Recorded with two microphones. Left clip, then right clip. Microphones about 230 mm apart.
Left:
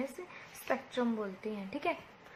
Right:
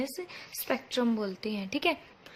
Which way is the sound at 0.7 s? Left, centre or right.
Right.